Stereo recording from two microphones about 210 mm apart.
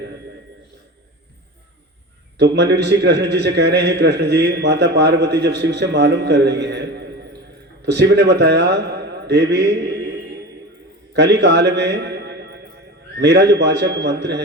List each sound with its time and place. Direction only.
2.4 s a man's voice: 55° right (ahead or behind)